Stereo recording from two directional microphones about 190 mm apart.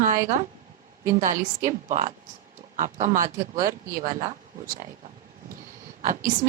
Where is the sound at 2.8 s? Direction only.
45° right (ahead or behind).